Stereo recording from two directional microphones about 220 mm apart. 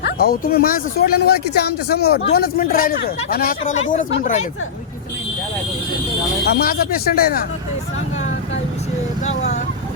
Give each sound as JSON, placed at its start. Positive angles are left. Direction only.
{"t": 0.0, "sound": "speech", "side_deg": 45}
{"t": 6.4, "sound": "speech", "side_deg": 45}
{"t": 9.2, "sound": "speech", "side_deg": 30}